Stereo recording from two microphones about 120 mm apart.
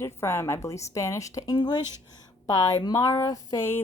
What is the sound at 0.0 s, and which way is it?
A woman's voice, 20° left (ahead or behind).